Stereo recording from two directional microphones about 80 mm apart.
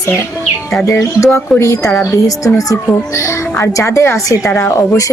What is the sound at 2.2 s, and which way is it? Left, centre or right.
Speech, left.